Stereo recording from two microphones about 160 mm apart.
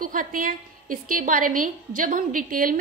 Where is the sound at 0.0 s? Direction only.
60° right (ahead or behind).